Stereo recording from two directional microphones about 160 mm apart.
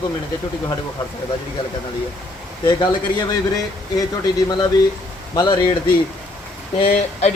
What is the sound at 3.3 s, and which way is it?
Speech, 20° left (ahead or behind).